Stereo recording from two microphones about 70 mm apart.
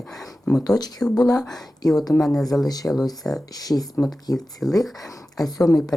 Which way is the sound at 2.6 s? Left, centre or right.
Left.